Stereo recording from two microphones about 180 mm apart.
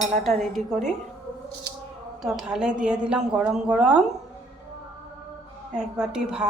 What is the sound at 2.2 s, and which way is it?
Dishes, centre (ahead or behind).